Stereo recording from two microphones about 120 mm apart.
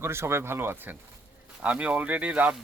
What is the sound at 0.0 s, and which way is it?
Speech, 20° right (ahead or behind).